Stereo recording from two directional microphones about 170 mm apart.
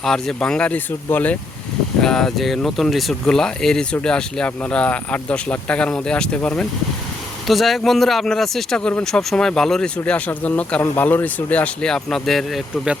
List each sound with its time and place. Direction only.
0.0 s speech: 5° left (ahead or behind)